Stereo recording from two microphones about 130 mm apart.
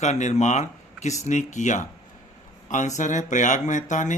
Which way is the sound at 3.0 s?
70° left (ahead or behind).